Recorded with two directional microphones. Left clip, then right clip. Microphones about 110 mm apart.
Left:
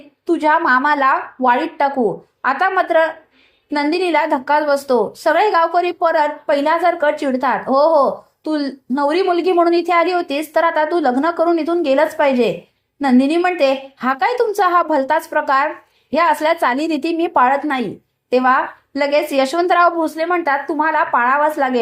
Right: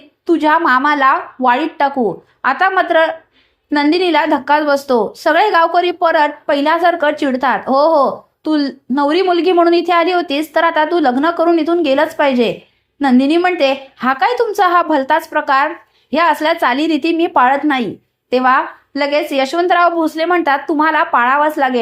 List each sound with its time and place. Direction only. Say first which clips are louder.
0.3 s a woman's voice: right 2 dB; 20° right (ahead or behind)
19.3 s speech: right 2 dB; 5° right (ahead or behind)
20.1 s speech: right 4 dB; 20° right (ahead or behind)